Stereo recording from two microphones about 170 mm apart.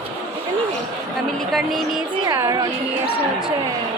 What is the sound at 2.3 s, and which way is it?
Speech, 20° right (ahead or behind).